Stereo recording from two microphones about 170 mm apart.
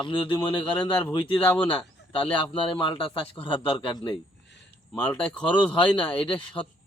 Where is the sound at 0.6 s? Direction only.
5° left (ahead or behind).